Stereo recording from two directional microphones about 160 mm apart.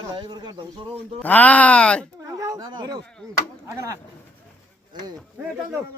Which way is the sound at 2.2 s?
20° right (ahead or behind).